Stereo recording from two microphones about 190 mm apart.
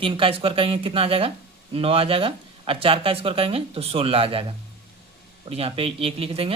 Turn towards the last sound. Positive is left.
turn(degrees=-30)  # may be behind; listen again after turning